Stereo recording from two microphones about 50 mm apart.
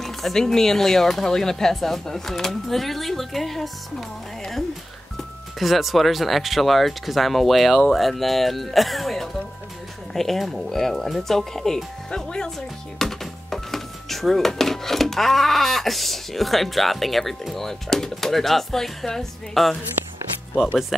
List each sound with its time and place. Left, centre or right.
0.0 s speech: centre
5.6 s speech: centre
20.6 s speech: centre